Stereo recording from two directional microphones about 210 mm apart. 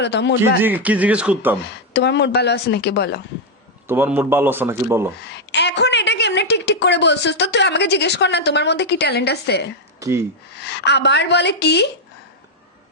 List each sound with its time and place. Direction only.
0.0 s speech: 55° left (ahead or behind)
0.6 s speech: 10° right (ahead or behind)
1.9 s a woman's voice: 55° left (ahead or behind)
3.8 s speech: 10° right (ahead or behind)
5.5 s a woman's voice: 55° left (ahead or behind)
10.0 s speech: 15° right (ahead or behind)
10.6 s a woman's voice: 55° left (ahead or behind)